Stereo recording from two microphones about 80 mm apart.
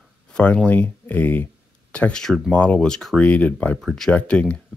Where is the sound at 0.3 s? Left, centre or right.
Centre.